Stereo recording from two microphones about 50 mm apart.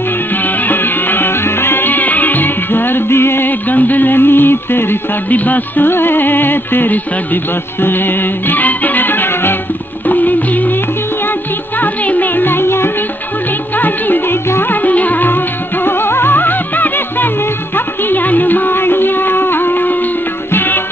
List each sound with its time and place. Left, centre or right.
0.7 s music: left
3.7 s a sound: left
5.3 s music: left
5.9 s music: left
11.8 s music: left
13.7 s music: left
15.8 s music: left